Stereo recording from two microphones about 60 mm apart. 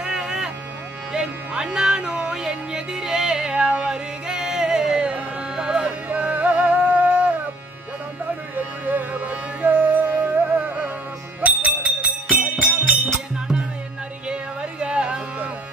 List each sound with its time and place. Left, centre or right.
0.0 s music: centre
6.0 s music: right
8.8 s music: right
11.4 s music: right
14.2 s music: centre